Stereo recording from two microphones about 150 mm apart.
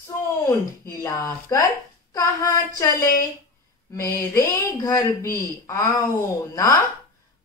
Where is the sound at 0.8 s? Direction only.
20° left (ahead or behind).